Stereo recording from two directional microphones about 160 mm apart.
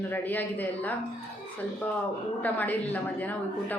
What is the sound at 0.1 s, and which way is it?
Speech, 10° left (ahead or behind).